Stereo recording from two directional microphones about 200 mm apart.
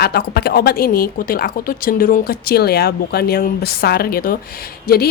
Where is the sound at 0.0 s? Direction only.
50° left (ahead or behind).